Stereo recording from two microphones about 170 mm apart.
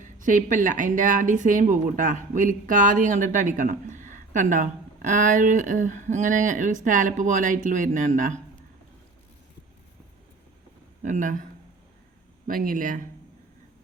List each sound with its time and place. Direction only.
0.0 s speech: 50° right (ahead or behind)
11.0 s speech: 45° right (ahead or behind)
12.5 s speech: 55° right (ahead or behind)